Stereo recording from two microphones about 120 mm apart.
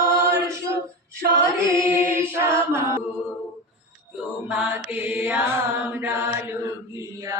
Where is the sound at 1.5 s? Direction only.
25° right (ahead or behind).